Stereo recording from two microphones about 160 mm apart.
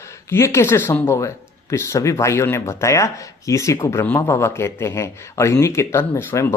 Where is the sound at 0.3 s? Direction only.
15° left (ahead or behind).